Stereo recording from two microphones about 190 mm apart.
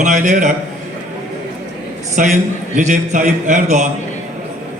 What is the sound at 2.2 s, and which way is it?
A man's voice, 45° right (ahead or behind).